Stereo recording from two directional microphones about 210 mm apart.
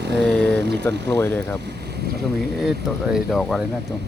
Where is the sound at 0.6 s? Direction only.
55° right (ahead or behind).